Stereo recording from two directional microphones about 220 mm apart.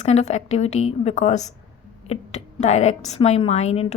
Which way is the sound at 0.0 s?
30° left (ahead or behind).